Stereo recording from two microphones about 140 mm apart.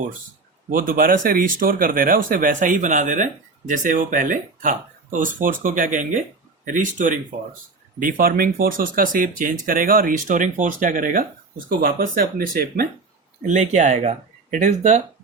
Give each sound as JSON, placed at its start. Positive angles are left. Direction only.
{"t": 0.7, "sound": "speech", "side_deg": -85}
{"t": 11.8, "sound": "speech", "side_deg": -90}
{"t": 13.4, "sound": "speech", "side_deg": -65}